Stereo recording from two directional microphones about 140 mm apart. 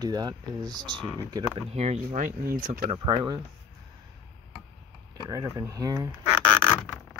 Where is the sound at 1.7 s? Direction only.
50° right (ahead or behind); by 2.7 s 90° right.